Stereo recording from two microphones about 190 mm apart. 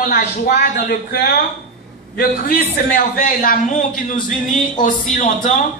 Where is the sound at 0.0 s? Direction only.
55° left (ahead or behind).